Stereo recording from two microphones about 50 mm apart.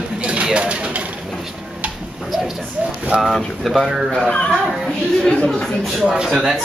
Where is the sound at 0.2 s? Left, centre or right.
Right.